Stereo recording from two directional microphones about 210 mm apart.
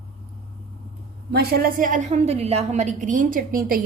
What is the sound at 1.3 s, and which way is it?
A woman's voice, 45° right (ahead or behind).